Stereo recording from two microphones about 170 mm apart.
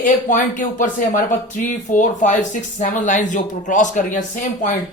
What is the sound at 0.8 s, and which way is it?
Speech, 50° left (ahead or behind).